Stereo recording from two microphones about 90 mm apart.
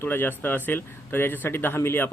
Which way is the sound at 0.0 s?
25° left (ahead or behind).